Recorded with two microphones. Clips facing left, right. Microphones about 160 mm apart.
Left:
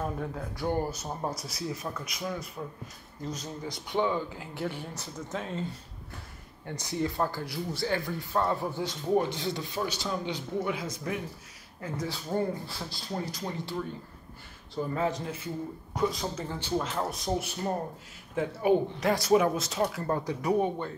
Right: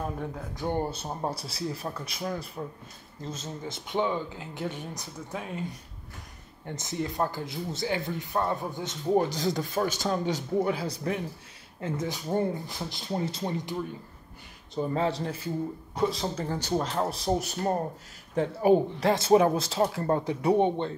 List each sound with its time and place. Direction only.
0.6 s speech: 20° right (ahead or behind)
9.1 s speech: 40° right (ahead or behind)
11.8 s speech: 20° right (ahead or behind)
14.8 s speech: 30° right (ahead or behind)